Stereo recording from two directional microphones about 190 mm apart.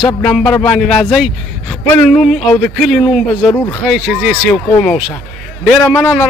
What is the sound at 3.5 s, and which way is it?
Speech, 10° left (ahead or behind).